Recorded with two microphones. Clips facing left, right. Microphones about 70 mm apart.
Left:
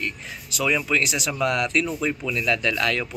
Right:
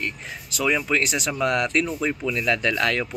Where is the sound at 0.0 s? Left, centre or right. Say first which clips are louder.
Even; right.